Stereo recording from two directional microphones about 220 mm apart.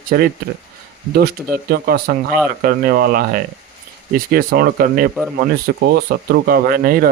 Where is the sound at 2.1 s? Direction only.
45° right (ahead or behind).